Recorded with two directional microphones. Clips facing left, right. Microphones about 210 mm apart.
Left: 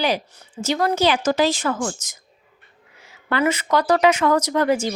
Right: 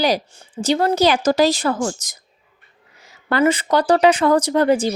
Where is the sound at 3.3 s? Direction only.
30° right (ahead or behind).